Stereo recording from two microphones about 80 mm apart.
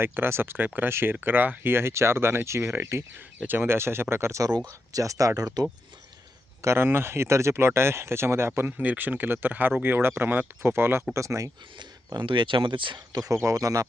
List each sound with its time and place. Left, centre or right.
0.0 s speech: right
6.6 s speech: right
11.8 s speech: right
13.3 s speech: right